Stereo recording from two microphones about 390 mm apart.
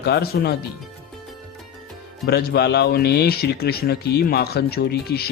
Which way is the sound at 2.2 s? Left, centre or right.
Left.